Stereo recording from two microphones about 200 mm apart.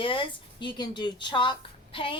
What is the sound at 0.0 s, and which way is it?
A woman's voice, 25° left (ahead or behind).